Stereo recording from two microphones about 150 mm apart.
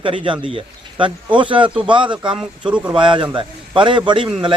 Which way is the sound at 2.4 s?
5° right (ahead or behind).